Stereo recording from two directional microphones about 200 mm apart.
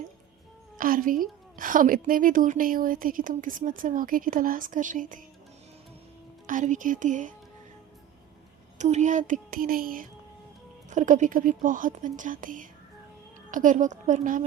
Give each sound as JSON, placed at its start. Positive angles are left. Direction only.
{"t": 0.8, "sound": "a woman's voice", "side_deg": -45}
{"t": 6.5, "sound": "speech", "side_deg": -40}
{"t": 8.8, "sound": "speech", "side_deg": -35}